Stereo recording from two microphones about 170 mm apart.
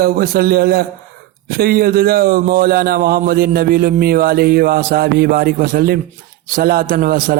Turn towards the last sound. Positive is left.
turn(degrees=-60)  # may be behind; listen again after turning